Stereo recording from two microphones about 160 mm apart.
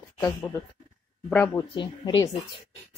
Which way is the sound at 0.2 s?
15° left (ahead or behind).